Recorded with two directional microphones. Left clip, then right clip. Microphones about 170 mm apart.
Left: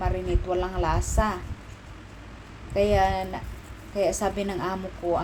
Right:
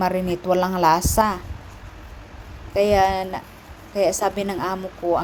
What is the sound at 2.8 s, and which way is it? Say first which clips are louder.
A woman's voice: right 5 dB; 55° right (ahead or behind).